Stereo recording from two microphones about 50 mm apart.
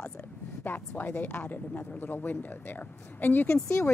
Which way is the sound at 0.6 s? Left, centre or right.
Left.